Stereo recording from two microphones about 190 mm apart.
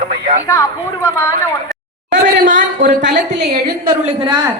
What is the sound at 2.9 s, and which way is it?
Speech, 70° right (ahead or behind).